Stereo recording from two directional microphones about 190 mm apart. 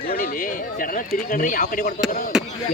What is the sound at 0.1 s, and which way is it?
Speech, 50° left (ahead or behind).